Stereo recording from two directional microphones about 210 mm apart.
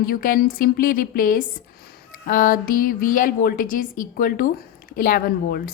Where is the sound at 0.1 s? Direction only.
45° left (ahead or behind).